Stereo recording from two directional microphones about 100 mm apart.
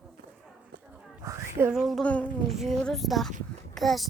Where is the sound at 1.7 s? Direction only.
Centre (ahead or behind).